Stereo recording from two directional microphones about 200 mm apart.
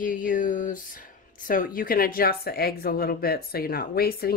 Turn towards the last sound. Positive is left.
turn(degrees=50)  # may be behind; listen again after turning